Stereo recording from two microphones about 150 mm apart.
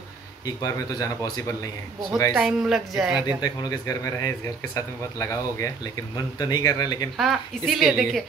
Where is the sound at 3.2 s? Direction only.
25° left (ahead or behind).